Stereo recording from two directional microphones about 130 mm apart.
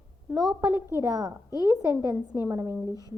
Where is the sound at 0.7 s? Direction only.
20° right (ahead or behind).